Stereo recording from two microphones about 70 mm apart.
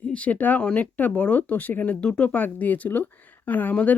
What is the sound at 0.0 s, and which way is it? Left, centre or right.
Speech, centre.